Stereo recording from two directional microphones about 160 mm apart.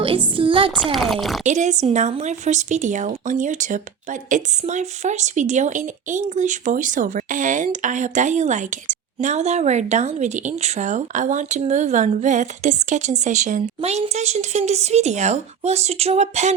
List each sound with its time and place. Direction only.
0.0 s a sound: 35° right (ahead or behind)
0.9 s speech: centre (ahead or behind)
1.5 s speech: 50° right (ahead or behind)